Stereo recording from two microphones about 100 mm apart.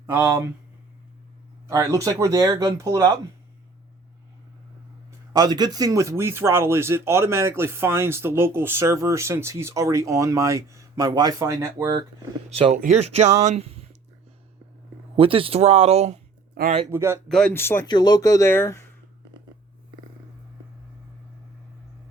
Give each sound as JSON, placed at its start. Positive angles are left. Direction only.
{"t": 0.0, "sound": "speech", "side_deg": -30}
{"t": 1.6, "sound": "speech", "side_deg": -30}
{"t": 5.3, "sound": "speech", "side_deg": -40}
{"t": 12.5, "sound": "speech", "side_deg": -85}
{"t": 15.1, "sound": "speech", "side_deg": -65}
{"t": 16.9, "sound": "speech", "side_deg": -30}
{"t": 17.2, "sound": "speech", "side_deg": 5}
{"t": 17.5, "sound": "speech", "side_deg": 25}
{"t": 17.8, "sound": "speech", "side_deg": 45}
{"t": 18.4, "sound": "speech", "side_deg": 25}